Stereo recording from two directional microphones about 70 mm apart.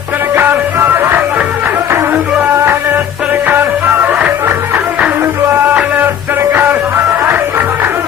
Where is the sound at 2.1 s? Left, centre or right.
Centre.